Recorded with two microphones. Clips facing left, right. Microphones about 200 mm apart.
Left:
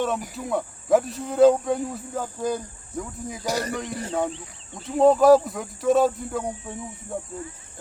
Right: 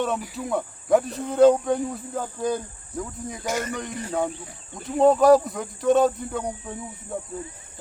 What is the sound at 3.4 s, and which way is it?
Speech, 35° left (ahead or behind).